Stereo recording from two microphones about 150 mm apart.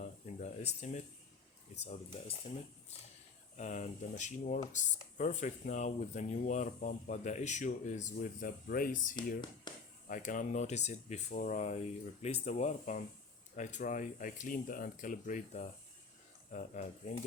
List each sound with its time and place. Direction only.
0.0 s a sound: 50° left (ahead or behind)
1.8 s speech: 45° left (ahead or behind)
3.6 s speech: 55° left (ahead or behind)
8.6 s speech: 70° left (ahead or behind)
9.7 s a sound: 30° left (ahead or behind)
10.1 s speech: 65° left (ahead or behind)